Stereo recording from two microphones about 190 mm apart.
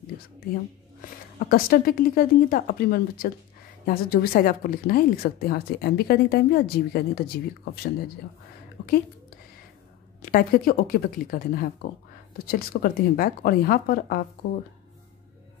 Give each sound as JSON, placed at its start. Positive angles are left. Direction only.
{"t": 1.4, "sound": "a woman's voice", "side_deg": 50}
{"t": 8.8, "sound": "a sound", "side_deg": 60}
{"t": 10.2, "sound": "speech", "side_deg": 50}